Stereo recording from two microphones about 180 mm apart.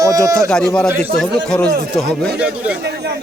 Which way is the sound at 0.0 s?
20° right (ahead or behind).